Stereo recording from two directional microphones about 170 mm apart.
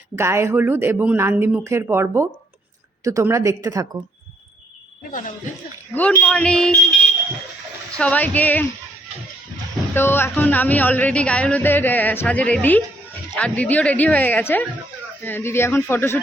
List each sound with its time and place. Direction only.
0.2 s a woman's voice: 15° right (ahead or behind)
5.9 s speech: 10° left (ahead or behind)
7.9 s speech: 10° left (ahead or behind)
9.9 s speech: 15° left (ahead or behind)